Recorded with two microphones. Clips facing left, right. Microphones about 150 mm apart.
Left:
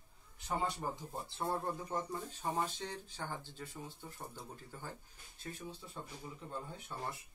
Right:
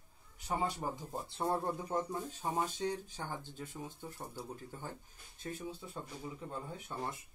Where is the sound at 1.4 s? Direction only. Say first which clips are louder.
Right 3 dB; 15° right (ahead or behind).